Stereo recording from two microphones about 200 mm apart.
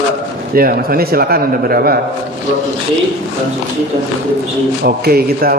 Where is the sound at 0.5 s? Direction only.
45° right (ahead or behind).